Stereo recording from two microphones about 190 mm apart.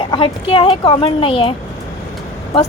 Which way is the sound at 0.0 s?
30° left (ahead or behind).